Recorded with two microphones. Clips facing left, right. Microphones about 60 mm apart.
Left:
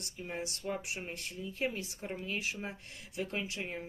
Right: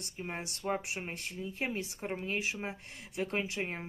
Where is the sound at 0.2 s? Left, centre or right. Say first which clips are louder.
Even; right.